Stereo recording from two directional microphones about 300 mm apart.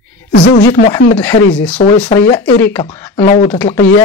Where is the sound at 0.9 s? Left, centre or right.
Centre.